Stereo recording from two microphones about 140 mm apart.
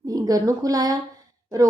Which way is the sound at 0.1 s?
25° right (ahead or behind).